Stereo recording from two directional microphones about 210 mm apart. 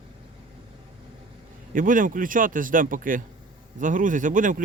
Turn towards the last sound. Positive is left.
turn(degrees=-40)  # may be behind; listen again after turning